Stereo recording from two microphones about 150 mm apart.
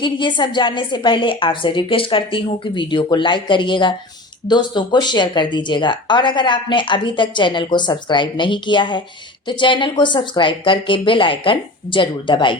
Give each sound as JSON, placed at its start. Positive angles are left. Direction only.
{"t": 0.0, "sound": "speech", "side_deg": 30}